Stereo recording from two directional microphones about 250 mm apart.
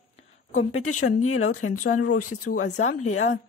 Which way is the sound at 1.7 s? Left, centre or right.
Left.